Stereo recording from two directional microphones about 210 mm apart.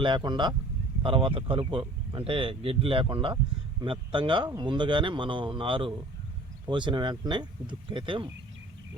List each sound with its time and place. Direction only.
0.0 s a man's voice: 20° right (ahead or behind)